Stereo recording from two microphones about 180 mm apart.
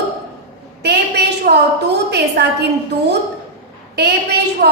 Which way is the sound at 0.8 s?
65° right (ahead or behind).